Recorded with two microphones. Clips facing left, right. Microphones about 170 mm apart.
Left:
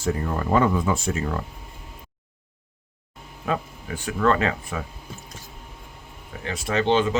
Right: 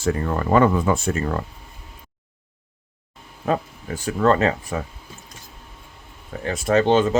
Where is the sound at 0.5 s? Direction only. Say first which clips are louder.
Right 4 dB; 55° right (ahead or behind).